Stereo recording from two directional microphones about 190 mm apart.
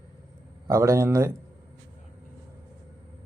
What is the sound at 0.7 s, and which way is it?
Speech, 15° right (ahead or behind).